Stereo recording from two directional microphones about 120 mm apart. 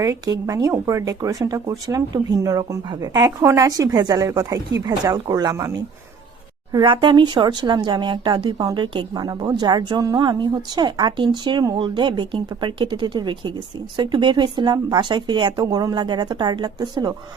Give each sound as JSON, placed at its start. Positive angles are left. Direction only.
{"t": 0.0, "sound": "speech", "side_deg": -30}
{"t": 6.7, "sound": "speech", "side_deg": -45}